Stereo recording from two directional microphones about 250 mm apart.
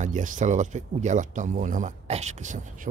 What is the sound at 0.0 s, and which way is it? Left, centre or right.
Speech, right.